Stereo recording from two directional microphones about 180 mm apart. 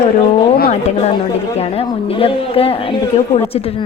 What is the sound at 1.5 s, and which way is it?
Speech, 35° left (ahead or behind).